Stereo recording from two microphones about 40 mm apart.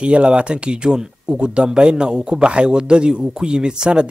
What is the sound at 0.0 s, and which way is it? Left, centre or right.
Speech, right.